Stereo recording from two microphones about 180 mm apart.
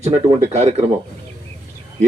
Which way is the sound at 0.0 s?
35° right (ahead or behind).